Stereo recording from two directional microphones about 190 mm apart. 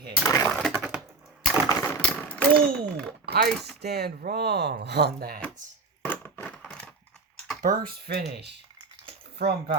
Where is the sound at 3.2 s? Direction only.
55° right (ahead or behind).